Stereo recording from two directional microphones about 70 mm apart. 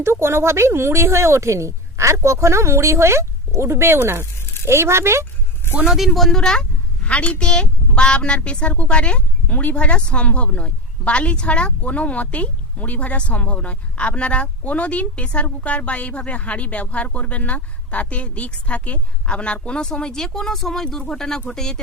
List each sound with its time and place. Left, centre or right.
0.0 s speech: right
5.7 s a man's voice: centre
6.1 s speech: centre